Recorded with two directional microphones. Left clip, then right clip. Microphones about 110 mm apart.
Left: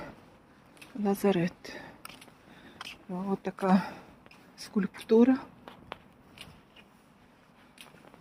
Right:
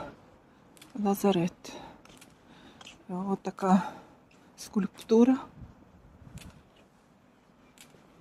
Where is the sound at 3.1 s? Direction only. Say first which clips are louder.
Right 1 dB; 20° right (ahead or behind).